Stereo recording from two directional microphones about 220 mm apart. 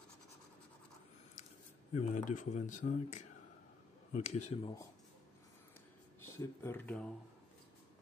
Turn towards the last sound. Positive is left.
turn(degrees=5)  # may be behind; listen again after turning